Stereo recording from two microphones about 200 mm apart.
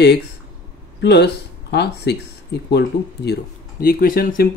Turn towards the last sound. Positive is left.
turn(degrees=50)  # may be behind; listen again after turning